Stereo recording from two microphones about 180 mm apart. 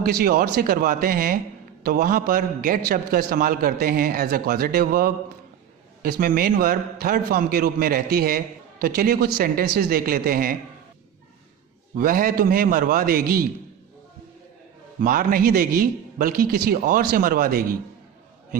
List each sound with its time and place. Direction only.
0.0 s a man's voice: 55° right (ahead or behind)
11.9 s a man's voice: 50° right (ahead or behind)
15.0 s a man's voice: 50° right (ahead or behind)